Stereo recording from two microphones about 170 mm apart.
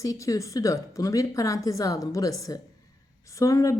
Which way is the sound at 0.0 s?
20° left (ahead or behind).